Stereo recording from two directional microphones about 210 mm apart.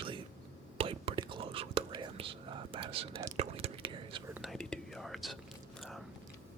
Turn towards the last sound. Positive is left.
turn(degrees=0)  # may be behind; listen again after turning